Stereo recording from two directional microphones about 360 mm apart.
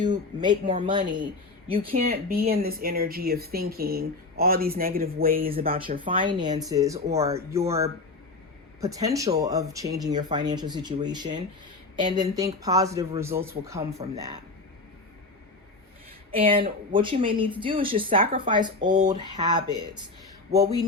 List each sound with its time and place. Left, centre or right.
0.0 s speech: centre
16.3 s speech: centre